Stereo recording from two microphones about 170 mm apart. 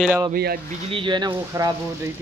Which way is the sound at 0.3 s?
65° right (ahead or behind).